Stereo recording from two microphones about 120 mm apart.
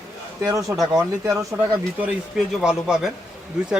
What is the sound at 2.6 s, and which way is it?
Speech, 5° right (ahead or behind).